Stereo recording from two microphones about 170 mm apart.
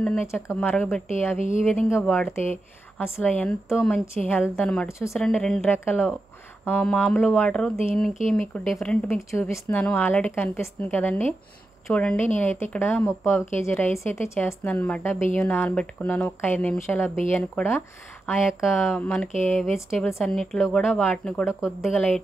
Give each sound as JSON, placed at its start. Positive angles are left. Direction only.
{"t": 0.0, "sound": "a woman's voice", "side_deg": 10}
{"t": 5.1, "sound": "speech", "side_deg": 5}
{"t": 9.0, "sound": "a woman's voice", "side_deg": 15}
{"t": 18.4, "sound": "a woman's voice", "side_deg": -5}